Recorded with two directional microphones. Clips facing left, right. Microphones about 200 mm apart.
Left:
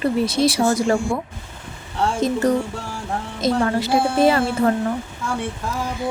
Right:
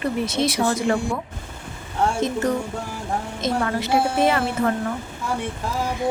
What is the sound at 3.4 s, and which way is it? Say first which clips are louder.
A woman's voice: left 5 dB; 30° left (ahead or behind).